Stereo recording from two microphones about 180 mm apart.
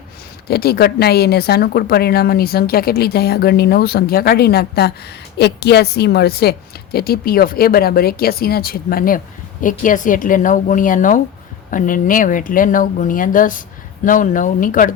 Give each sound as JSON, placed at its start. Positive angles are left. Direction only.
{"t": 0.4, "sound": "a woman's voice", "side_deg": 60}